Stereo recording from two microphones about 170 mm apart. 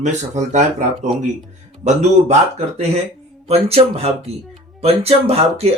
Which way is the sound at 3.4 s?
35° right (ahead or behind).